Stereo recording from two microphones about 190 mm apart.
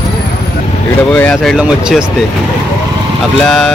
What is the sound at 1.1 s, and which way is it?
Speech, 5° left (ahead or behind).